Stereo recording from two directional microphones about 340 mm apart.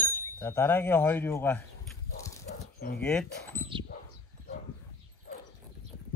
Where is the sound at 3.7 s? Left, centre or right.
Centre.